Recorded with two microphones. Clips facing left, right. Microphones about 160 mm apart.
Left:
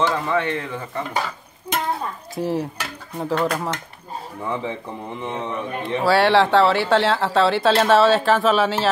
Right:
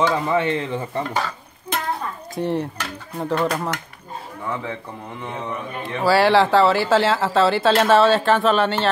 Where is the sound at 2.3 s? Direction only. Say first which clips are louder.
Right 1 dB; centre (ahead or behind).